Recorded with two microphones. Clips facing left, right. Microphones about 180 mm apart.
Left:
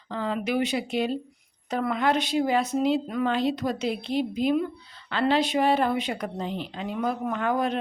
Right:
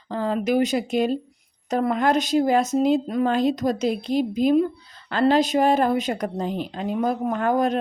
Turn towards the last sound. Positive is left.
turn(degrees=-40)  # may be behind; listen again after turning